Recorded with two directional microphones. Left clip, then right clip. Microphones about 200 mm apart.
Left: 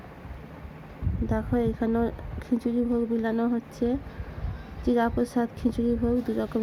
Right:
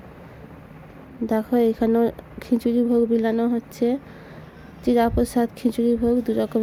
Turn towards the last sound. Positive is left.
turn(degrees=-15)  # may be behind; listen again after turning